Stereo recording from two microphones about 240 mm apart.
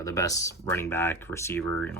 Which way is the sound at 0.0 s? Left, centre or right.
Centre.